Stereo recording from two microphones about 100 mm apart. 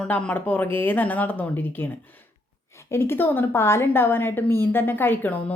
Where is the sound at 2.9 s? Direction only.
25° left (ahead or behind).